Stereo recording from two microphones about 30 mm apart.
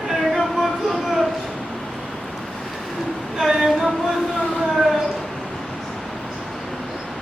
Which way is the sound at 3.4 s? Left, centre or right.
Centre.